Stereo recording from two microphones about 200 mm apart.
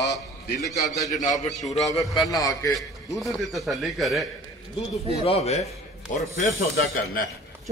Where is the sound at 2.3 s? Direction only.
15° left (ahead or behind).